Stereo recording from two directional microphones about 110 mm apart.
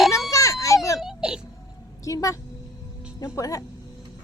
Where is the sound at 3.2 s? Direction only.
30° left (ahead or behind).